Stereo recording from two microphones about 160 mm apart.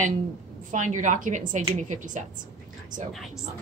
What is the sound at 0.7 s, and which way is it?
A woman's voice, 50° right (ahead or behind).